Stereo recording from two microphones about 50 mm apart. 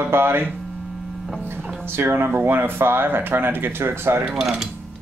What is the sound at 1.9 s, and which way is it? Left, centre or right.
Speech, right.